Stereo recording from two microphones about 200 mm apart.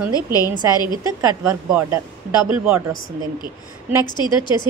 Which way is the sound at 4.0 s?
20° left (ahead or behind).